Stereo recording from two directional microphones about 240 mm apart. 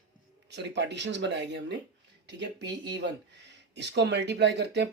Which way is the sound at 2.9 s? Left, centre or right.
Right.